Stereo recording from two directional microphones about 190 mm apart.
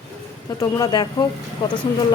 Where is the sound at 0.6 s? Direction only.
20° left (ahead or behind).